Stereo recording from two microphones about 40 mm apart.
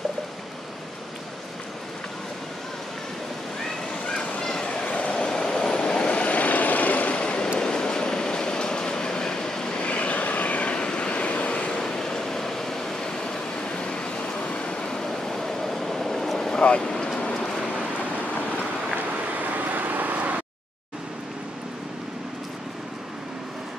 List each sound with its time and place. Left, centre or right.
4.4 s train: centre
4.9 s vehicle: left
7.6 s train: centre
9.8 s vehicle: left
10.7 s vehicle: left
11.8 s vehicle: centre
13.2 s vehicle: left
16.6 s vehicle: left
18.9 s vehicle: right